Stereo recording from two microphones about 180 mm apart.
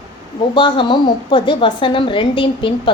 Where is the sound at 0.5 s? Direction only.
25° left (ahead or behind).